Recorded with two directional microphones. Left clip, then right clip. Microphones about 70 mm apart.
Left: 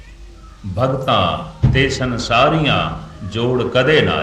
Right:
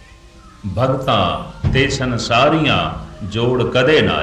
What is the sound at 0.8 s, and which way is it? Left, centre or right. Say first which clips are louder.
Speech: even; left.